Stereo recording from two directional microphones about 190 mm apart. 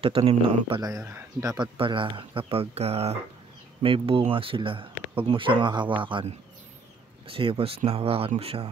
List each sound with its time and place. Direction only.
0.0 s speech: 30° right (ahead or behind)
0.8 s speech: 15° right (ahead or behind); by 8.6 s 30° right (ahead or behind)